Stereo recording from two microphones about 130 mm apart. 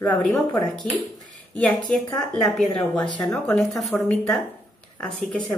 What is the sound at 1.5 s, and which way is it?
Speech, 5° left (ahead or behind).